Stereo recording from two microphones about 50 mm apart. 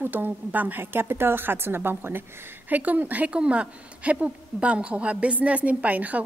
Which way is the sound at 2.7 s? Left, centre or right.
Right.